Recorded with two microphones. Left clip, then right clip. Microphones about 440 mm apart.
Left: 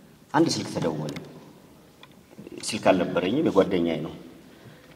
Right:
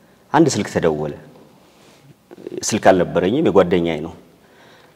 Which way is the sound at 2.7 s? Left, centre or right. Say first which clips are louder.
Right 8 dB; right.